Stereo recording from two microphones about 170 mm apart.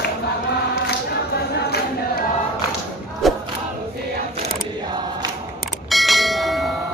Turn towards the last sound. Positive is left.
turn(degrees=0)  # may be behind; listen again after turning